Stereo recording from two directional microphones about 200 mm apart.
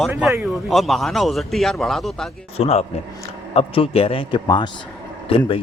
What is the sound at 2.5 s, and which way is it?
A man's voice, 30° left (ahead or behind).